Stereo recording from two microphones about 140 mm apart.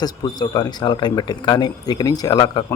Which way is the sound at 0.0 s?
30° left (ahead or behind).